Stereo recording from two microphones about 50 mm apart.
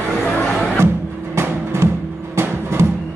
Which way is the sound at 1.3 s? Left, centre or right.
Right.